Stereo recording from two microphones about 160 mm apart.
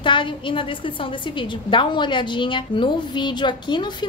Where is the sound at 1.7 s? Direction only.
30° left (ahead or behind).